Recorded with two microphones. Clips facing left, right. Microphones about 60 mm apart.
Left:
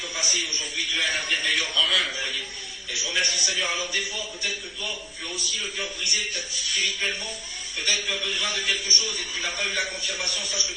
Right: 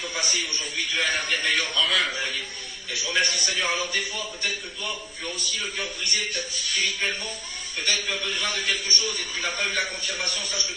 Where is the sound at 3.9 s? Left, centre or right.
Right.